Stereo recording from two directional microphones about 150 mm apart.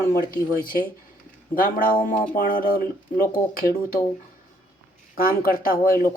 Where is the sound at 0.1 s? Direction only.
75° left (ahead or behind).